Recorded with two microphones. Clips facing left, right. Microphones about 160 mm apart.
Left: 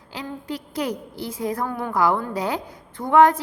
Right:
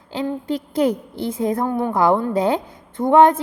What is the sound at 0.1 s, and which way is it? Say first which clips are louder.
A woman's voice: right 8 dB; 25° right (ahead or behind).